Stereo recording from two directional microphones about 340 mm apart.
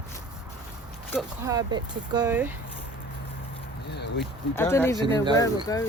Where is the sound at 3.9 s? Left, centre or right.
Left.